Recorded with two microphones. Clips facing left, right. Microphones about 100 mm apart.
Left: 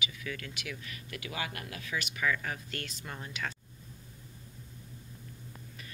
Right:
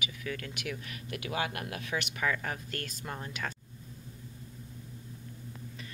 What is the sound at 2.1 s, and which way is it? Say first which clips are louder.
Speech: left 1 dB; 30° right (ahead or behind).